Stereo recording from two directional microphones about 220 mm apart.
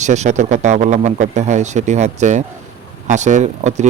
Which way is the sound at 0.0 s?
30° right (ahead or behind).